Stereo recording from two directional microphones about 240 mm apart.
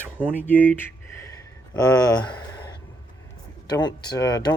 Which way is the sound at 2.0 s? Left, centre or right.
Centre.